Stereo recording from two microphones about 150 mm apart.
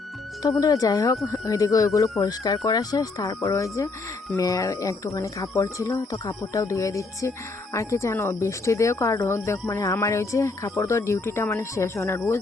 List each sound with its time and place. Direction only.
0.6 s speech: 25° left (ahead or behind)